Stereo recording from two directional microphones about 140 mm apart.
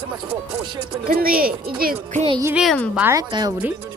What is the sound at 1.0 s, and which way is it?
Speech, 90° right.